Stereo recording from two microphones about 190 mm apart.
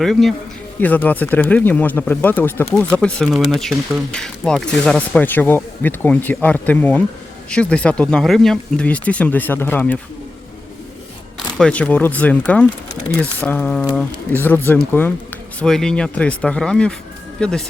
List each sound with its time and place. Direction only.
0.0 s speech: centre (ahead or behind)
11.5 s speech: 5° left (ahead or behind)